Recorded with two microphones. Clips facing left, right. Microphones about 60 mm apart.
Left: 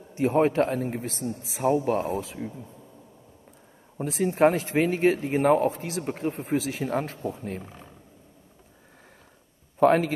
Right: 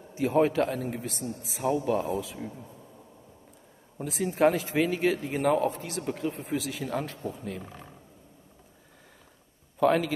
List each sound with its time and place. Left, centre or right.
0.2 s a man's voice: left
1.6 s a man's voice: left
2.0 s speech: left
4.0 s a man's voice: left
9.8 s a man's voice: left